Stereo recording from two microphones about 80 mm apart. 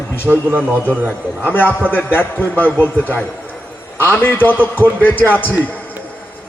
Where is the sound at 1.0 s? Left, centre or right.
Left.